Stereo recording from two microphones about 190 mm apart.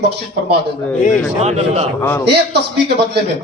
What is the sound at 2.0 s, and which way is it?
Speech, 10° left (ahead or behind).